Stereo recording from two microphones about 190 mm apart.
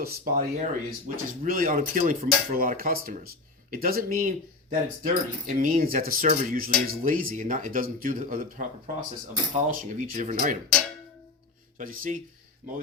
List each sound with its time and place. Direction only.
0.0 s speech: 55° right (ahead or behind)
0.6 s speech: 40° right (ahead or behind)
11.8 s speech: 45° right (ahead or behind)